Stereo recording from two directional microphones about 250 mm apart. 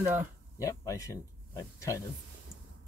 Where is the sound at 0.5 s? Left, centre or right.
Centre.